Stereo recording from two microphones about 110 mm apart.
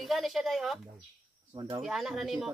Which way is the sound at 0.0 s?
Centre (ahead or behind).